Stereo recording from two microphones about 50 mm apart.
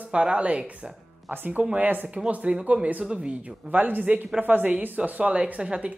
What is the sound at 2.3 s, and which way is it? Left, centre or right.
Speech, right.